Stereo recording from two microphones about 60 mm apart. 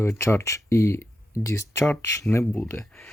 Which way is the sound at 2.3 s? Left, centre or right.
Left.